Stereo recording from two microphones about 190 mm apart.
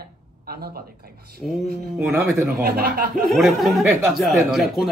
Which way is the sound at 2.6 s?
55° right (ahead or behind).